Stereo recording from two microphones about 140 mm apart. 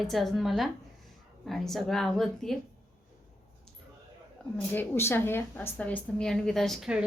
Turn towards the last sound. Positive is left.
turn(degrees=0)  # may be behind; listen again after turning